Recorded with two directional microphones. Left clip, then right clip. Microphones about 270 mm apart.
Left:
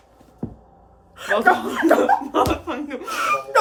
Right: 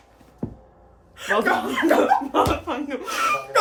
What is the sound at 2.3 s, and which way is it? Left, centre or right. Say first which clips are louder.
Speech: left 1 dB; centre.